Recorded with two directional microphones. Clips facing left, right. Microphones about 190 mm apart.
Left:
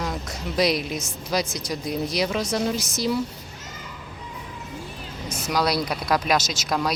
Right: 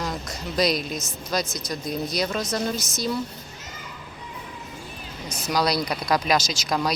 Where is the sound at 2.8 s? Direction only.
35° left (ahead or behind).